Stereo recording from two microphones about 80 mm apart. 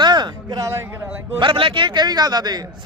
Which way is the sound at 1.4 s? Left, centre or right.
Right.